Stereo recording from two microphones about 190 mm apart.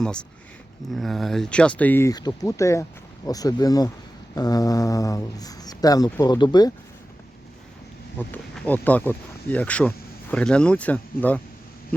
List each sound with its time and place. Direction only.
0.0 s speech: 5° left (ahead or behind); by 6.7 s 20° left (ahead or behind)
8.3 s speech: 10° left (ahead or behind)